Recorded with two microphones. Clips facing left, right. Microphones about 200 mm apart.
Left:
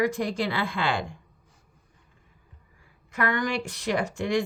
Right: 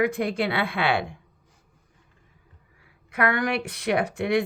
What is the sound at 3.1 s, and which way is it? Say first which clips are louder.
Speech: right 3 dB; 65° right (ahead or behind).